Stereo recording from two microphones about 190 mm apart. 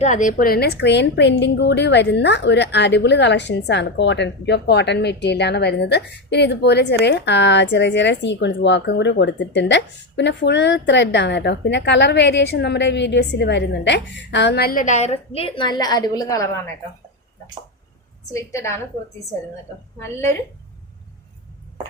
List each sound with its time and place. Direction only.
0.0 s a woman's voice: 40° left (ahead or behind); by 16.7 s 15° left (ahead or behind)
18.3 s a woman's voice: 15° left (ahead or behind)
20.0 s a woman's voice: 15° left (ahead or behind)